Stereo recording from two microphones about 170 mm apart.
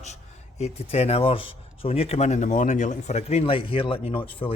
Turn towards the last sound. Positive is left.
turn(degrees=30)  # may be behind; listen again after turning